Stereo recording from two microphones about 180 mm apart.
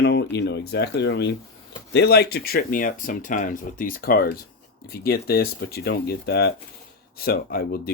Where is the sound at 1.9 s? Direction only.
65° left (ahead or behind).